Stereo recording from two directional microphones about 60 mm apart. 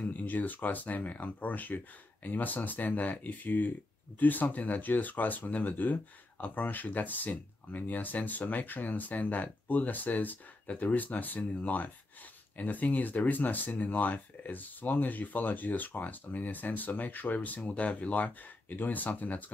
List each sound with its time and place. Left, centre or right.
0.1 s speech: left
17.6 s speech: centre